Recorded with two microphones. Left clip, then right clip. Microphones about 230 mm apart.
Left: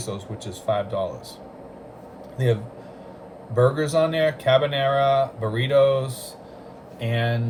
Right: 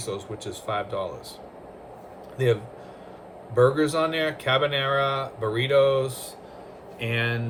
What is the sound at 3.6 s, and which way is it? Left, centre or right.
Speech, right.